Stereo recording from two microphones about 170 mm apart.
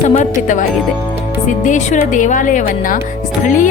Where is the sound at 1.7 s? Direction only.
45° left (ahead or behind).